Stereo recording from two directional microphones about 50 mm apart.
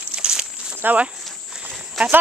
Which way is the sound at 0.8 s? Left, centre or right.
Right.